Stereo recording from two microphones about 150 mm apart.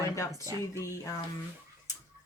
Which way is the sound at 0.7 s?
20° left (ahead or behind).